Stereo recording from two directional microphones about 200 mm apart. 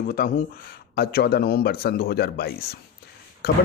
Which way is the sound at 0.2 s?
45° left (ahead or behind).